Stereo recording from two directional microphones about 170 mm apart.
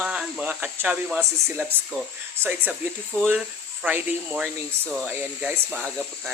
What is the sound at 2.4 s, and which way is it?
Speech, 10° right (ahead or behind).